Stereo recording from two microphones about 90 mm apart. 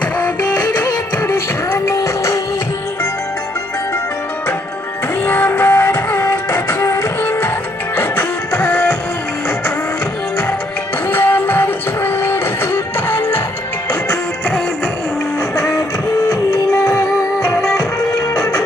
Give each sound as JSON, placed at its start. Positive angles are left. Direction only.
{"t": 0.9, "sound": "music", "side_deg": 35}
{"t": 5.2, "sound": "music", "side_deg": 25}
{"t": 11.1, "sound": "music", "side_deg": 25}
{"t": 15.5, "sound": "music", "side_deg": 35}